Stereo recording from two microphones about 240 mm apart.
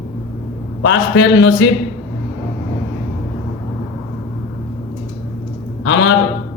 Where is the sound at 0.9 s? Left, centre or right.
Left.